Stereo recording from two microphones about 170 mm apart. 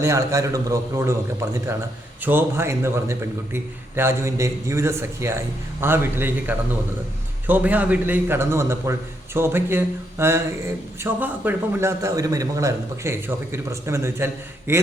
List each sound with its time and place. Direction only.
0.0 s a man's voice: 20° right (ahead or behind)
2.2 s a man's voice: 15° right (ahead or behind)